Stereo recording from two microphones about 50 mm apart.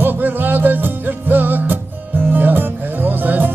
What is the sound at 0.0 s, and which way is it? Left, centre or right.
Music, right.